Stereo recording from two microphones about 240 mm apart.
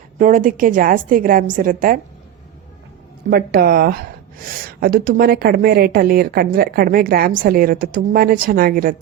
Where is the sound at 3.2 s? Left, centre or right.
Right.